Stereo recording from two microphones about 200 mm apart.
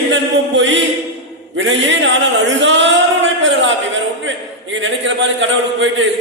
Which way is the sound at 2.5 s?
65° right (ahead or behind).